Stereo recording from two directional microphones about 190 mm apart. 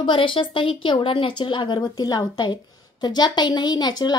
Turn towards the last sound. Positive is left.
turn(degrees=20)  # may be behind; listen again after turning